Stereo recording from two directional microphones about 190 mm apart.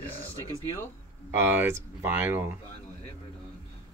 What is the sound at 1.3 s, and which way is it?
Speech, 10° right (ahead or behind).